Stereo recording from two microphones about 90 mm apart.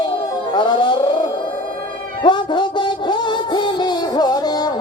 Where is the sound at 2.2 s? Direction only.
60° left (ahead or behind).